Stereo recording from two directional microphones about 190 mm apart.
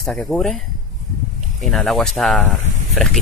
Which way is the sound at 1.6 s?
Centre (ahead or behind).